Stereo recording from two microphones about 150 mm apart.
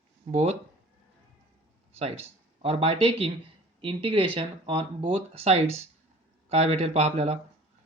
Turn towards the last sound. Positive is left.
turn(degrees=-45)  # may be behind; listen again after turning